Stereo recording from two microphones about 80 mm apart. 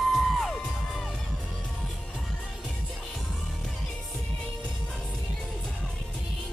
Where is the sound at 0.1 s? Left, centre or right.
Centre.